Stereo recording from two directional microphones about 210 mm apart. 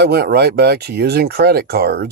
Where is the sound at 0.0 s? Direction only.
50° right (ahead or behind).